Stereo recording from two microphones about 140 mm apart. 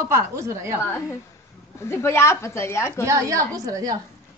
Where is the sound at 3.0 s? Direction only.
20° right (ahead or behind).